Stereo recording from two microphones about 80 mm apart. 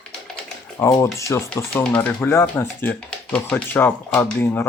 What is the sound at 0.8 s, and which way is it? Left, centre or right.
Speech, left.